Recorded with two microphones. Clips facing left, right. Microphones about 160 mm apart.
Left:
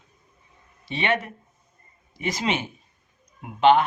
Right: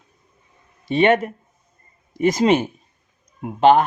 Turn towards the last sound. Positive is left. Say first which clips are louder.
# right 4 dB
turn(degrees=-45)  # may be behind; listen again after turning